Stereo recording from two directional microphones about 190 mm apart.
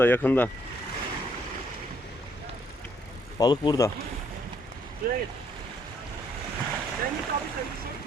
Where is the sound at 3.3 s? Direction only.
25° left (ahead or behind).